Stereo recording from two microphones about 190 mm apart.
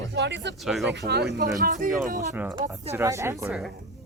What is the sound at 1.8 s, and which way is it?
Speech, 45° right (ahead or behind).